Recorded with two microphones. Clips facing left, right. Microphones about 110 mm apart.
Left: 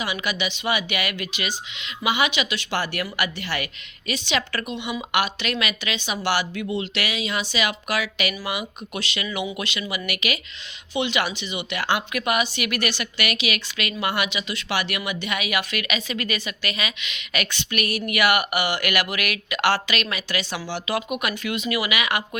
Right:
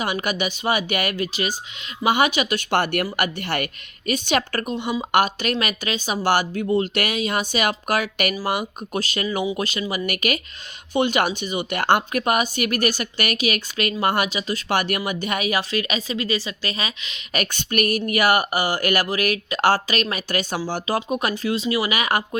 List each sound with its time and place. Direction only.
0.0 s speech: 50° right (ahead or behind)